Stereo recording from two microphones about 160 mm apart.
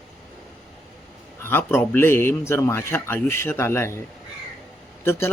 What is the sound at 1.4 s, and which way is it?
Speech, 15° left (ahead or behind).